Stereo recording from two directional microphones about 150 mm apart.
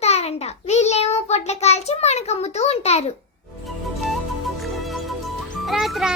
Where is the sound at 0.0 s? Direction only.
45° left (ahead or behind).